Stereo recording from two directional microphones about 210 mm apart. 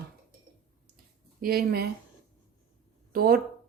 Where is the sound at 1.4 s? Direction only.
45° right (ahead or behind).